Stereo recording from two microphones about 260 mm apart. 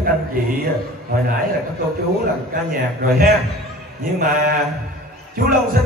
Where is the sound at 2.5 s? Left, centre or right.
Right.